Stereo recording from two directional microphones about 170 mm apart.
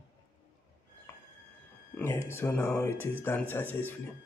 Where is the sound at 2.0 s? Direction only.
15° left (ahead or behind).